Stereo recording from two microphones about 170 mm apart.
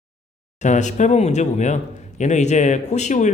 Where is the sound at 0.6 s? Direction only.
45° left (ahead or behind).